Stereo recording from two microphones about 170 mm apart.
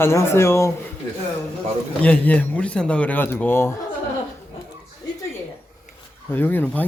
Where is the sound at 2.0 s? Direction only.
10° left (ahead or behind).